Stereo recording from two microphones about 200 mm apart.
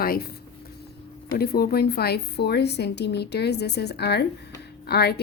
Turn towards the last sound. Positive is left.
turn(degrees=50)  # may be behind; listen again after turning